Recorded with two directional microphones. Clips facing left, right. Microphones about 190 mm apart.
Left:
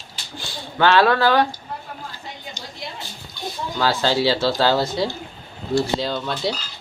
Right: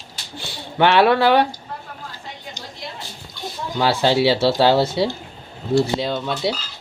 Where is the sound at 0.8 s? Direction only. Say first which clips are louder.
Right 2 dB; 20° right (ahead or behind).